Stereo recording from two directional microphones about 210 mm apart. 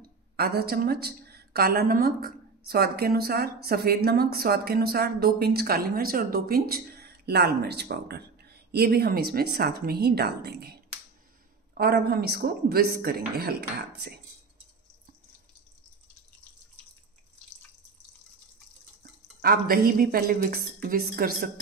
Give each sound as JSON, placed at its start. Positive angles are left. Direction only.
{"t": 0.4, "sound": "a woman's voice", "side_deg": -50}
{"t": 19.4, "sound": "a woman's voice", "side_deg": -45}